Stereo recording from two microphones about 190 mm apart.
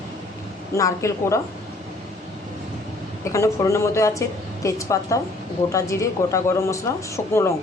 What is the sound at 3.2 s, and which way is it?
A woman's voice, 15° left (ahead or behind).